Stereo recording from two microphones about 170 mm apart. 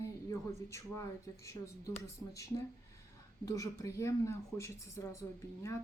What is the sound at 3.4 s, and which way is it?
Speech, 20° left (ahead or behind).